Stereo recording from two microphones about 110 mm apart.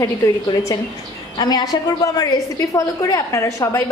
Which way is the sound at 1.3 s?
40° left (ahead or behind).